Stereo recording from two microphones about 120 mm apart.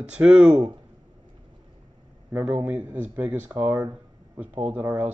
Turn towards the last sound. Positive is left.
turn(degrees=-15)  # may be behind; listen again after turning